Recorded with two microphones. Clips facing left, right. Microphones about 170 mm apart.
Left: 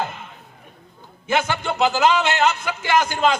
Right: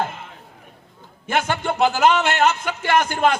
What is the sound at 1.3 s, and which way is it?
A man's voice, 55° right (ahead or behind).